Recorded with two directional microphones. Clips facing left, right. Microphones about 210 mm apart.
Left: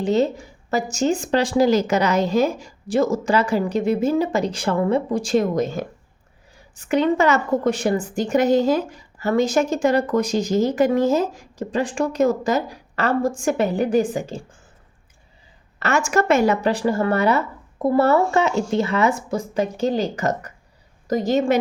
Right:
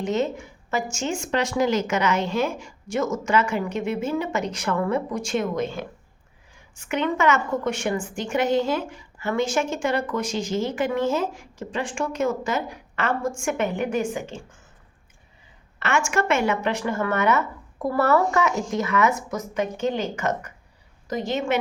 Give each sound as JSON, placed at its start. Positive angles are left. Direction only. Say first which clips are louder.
{"t": 0.0, "sound": "a woman's voice", "louder": "left 5 dB", "side_deg": 35}
{"t": 15.8, "sound": "a woman's voice", "louder": "left 4 dB", "side_deg": 40}